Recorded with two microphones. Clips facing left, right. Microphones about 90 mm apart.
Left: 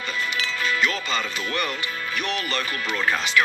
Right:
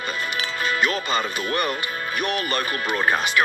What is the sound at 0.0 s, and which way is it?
Speech, 50° right (ahead or behind).